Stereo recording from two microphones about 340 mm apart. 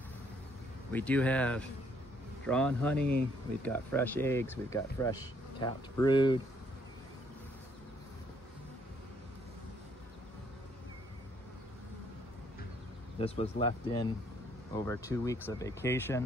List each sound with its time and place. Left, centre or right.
0.9 s speech: centre
13.2 s speech: centre